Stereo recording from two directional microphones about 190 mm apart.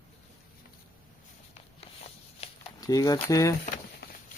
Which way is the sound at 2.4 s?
35° left (ahead or behind).